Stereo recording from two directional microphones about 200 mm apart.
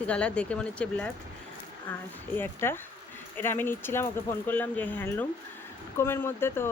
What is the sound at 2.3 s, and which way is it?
Speech, 10° left (ahead or behind).